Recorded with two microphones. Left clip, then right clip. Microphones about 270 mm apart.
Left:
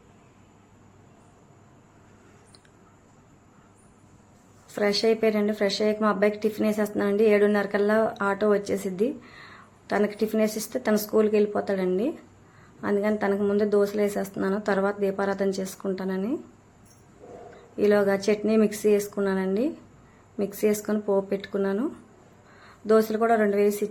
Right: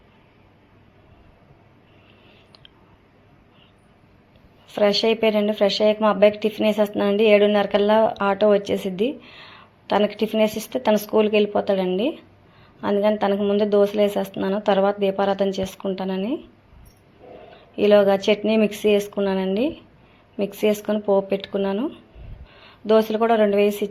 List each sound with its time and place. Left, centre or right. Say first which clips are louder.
5.0 s speech: right 4 dB; centre
10.4 s speech: right 5 dB; centre
10.7 s speech: right 5 dB; centre
17.7 s speech: right 6 dB; centre